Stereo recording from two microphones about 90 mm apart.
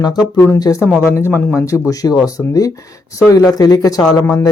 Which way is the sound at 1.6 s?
35° left (ahead or behind).